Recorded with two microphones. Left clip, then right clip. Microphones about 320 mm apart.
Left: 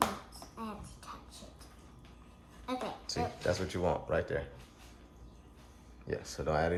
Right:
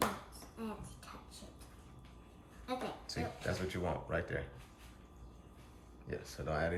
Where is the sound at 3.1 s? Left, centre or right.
Centre.